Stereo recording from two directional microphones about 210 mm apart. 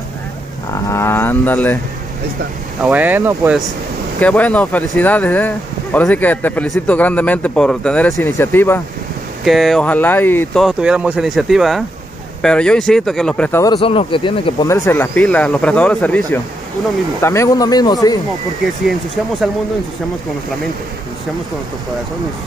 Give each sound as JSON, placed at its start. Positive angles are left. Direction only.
{"t": 0.8, "sound": "a man's voice", "side_deg": 15}
{"t": 2.8, "sound": "speech", "side_deg": -5}
{"t": 4.2, "sound": "a man's voice", "side_deg": 5}
{"t": 9.4, "sound": "speech", "side_deg": 0}
{"t": 13.7, "sound": "speech", "side_deg": 25}
{"t": 14.7, "sound": "a man's voice", "side_deg": 10}